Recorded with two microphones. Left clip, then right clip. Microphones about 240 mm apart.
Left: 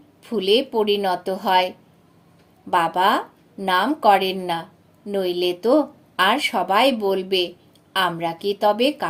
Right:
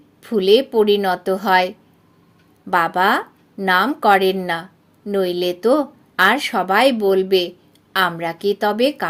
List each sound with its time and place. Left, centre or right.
0.2 s a woman's voice: right